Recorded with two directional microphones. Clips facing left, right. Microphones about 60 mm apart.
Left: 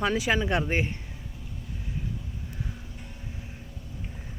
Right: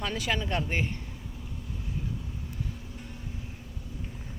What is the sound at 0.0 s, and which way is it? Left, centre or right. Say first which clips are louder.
Speech: left 6 dB; centre.